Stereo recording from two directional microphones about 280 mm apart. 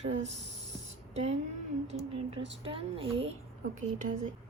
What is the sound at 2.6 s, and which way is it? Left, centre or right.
Female singing, centre.